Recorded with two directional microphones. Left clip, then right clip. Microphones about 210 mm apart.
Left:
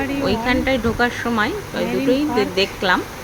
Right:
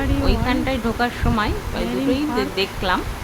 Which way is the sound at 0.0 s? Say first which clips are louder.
Left 2 dB; 10° left (ahead or behind).